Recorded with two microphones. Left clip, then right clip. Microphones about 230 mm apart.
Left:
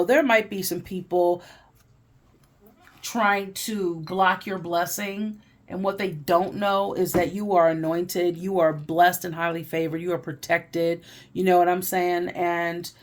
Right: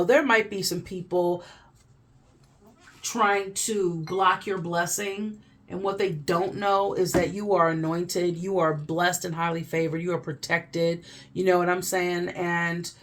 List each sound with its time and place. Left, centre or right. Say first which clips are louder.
0.0 s speech: left 1 dB; left
3.0 s speech: left 1 dB; left